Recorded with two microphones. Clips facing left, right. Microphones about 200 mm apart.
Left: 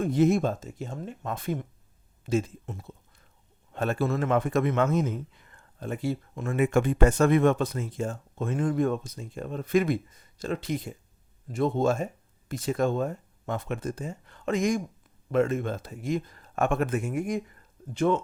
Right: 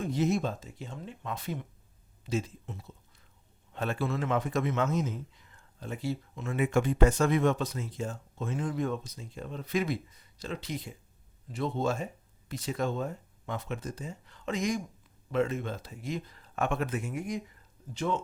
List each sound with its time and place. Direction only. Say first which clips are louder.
0.0 s a man's voice: left 6 dB; 50° left (ahead or behind)